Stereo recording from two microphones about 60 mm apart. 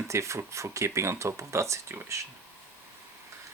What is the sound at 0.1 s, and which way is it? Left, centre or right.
Speech, right.